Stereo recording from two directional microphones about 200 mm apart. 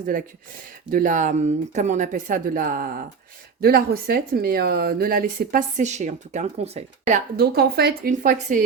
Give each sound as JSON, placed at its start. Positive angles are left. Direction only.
{"t": 0.9, "sound": "speech", "side_deg": -45}
{"t": 7.3, "sound": "speech", "side_deg": -50}